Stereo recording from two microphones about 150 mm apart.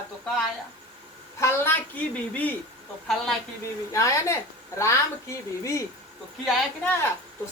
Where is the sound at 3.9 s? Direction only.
20° left (ahead or behind).